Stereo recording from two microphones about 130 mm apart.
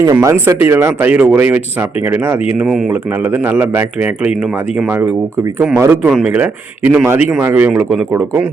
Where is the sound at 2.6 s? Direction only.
Centre (ahead or behind); by 6.1 s 20° right (ahead or behind).